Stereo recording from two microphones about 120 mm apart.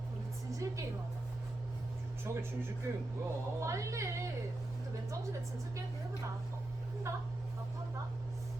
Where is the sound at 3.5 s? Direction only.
25° right (ahead or behind).